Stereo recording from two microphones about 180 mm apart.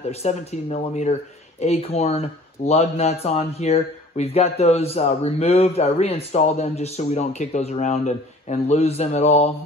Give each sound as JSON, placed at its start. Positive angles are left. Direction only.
{"t": 0.1, "sound": "speech", "side_deg": 35}